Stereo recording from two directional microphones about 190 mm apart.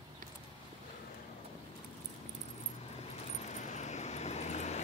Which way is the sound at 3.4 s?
40° left (ahead or behind).